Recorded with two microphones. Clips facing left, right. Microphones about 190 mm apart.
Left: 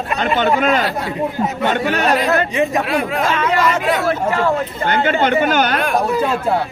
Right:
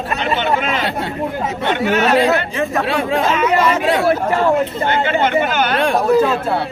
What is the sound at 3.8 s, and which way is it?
Speech, 30° right (ahead or behind).